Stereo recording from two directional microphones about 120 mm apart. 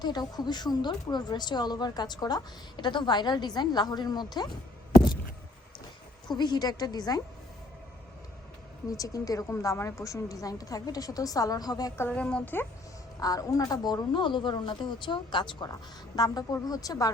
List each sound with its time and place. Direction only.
0.0 s a woman's voice: 35° left (ahead or behind)
6.2 s a woman's voice: 40° left (ahead or behind)
8.9 s a woman's voice: 30° left (ahead or behind)
11.9 s a woman's voice: 10° left (ahead or behind)
13.1 s a woman's voice: 30° left (ahead or behind)